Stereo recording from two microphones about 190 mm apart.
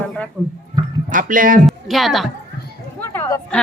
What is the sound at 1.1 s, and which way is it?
Speech, 45° right (ahead or behind).